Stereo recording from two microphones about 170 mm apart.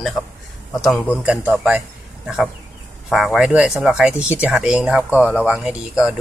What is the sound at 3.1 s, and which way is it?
Speech, centre (ahead or behind).